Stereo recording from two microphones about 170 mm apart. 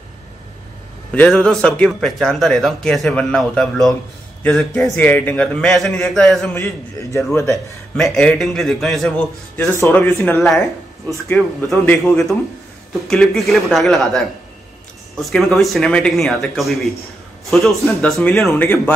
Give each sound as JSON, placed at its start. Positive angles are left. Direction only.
{"t": 1.1, "sound": "speech", "side_deg": 5}
{"t": 6.5, "sound": "a man's voice", "side_deg": 20}
{"t": 7.9, "sound": "speech", "side_deg": 0}
{"t": 11.7, "sound": "speech", "side_deg": 5}
{"t": 15.2, "sound": "speech", "side_deg": 0}